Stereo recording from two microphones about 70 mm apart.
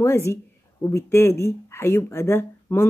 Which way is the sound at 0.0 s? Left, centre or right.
Left.